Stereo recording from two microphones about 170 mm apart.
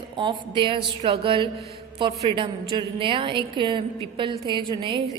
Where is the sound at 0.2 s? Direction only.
30° right (ahead or behind).